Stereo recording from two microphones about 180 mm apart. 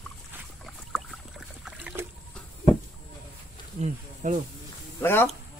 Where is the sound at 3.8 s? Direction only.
40° right (ahead or behind).